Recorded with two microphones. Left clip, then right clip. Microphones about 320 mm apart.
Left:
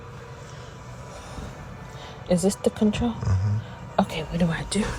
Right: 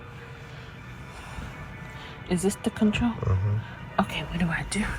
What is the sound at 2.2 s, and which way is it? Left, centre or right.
Speech, left.